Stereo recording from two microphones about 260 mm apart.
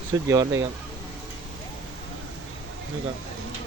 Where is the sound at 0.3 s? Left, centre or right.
Centre.